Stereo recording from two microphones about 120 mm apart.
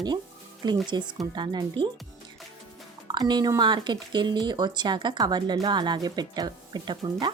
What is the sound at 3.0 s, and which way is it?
Speech, 35° right (ahead or behind).